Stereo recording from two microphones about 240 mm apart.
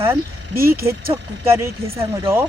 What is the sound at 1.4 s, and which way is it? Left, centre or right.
Speech, centre.